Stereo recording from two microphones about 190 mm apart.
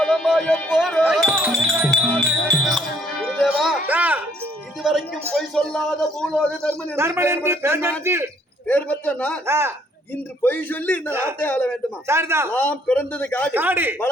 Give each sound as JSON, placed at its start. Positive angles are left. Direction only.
{"t": 0.0, "sound": "speech", "side_deg": 0}
{"t": 2.6, "sound": "music", "side_deg": 0}
{"t": 4.8, "sound": "speech", "side_deg": 0}
{"t": 6.9, "sound": "speech", "side_deg": -15}
{"t": 8.6, "sound": "a man's voice", "side_deg": 10}
{"t": 9.5, "sound": "speech", "side_deg": -15}
{"t": 10.4, "sound": "a man's voice", "side_deg": 10}
{"t": 11.1, "sound": "speech", "side_deg": -15}
{"t": 11.3, "sound": "a man's voice", "side_deg": 10}
{"t": 12.0, "sound": "speech", "side_deg": -15}
{"t": 12.5, "sound": "a man's voice", "side_deg": 10}
{"t": 13.5, "sound": "speech", "side_deg": -10}